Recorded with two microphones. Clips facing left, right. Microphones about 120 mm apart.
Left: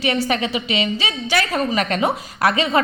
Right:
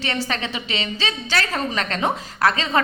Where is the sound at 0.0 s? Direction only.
15° left (ahead or behind).